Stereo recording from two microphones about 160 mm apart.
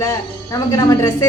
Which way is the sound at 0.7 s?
20° left (ahead or behind).